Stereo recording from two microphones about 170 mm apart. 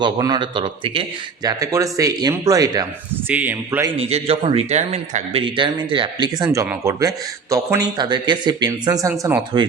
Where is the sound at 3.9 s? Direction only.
35° right (ahead or behind).